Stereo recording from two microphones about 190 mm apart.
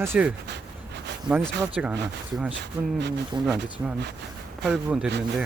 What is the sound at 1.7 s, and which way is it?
Speech, 5° right (ahead or behind).